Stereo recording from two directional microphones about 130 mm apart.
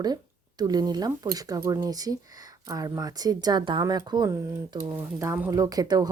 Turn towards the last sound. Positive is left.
turn(degrees=-30)  # may be behind; listen again after turning